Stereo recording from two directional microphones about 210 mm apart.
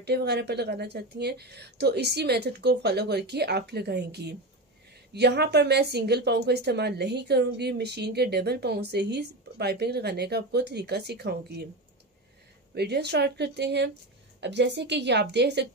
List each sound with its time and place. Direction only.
0.0 s a woman's voice: 50° right (ahead or behind)
12.7 s a woman's voice: 50° right (ahead or behind)